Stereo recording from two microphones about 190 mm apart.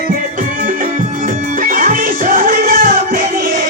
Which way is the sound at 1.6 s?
45° right (ahead or behind).